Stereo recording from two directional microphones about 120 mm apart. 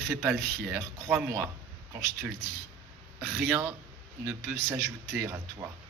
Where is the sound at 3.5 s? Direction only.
25° right (ahead or behind).